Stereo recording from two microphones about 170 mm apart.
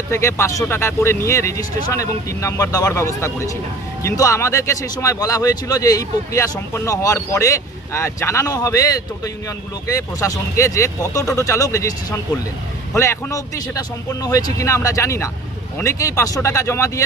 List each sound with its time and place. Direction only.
0.1 s speech: 15° left (ahead or behind)